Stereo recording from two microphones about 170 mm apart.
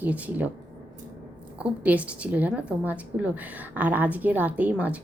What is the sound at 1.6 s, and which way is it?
A woman's voice, 10° right (ahead or behind).